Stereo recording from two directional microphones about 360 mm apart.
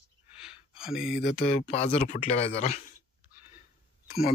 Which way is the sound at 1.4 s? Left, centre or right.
Centre.